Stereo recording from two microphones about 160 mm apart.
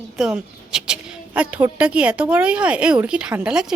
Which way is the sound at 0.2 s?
5° right (ahead or behind).